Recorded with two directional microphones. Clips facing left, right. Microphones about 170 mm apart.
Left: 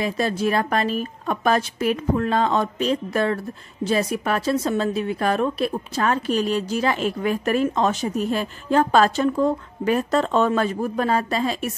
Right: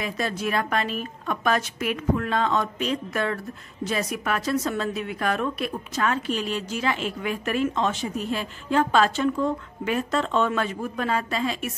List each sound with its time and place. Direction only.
0.0 s a woman's voice: 30° left (ahead or behind)